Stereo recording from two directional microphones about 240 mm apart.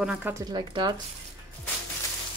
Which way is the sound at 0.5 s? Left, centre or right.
Centre.